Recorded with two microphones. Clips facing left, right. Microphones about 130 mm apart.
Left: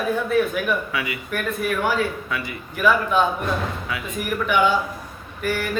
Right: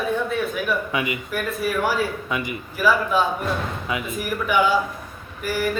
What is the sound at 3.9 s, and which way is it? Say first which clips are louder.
Speech: right 3 dB; 20° right (ahead or behind).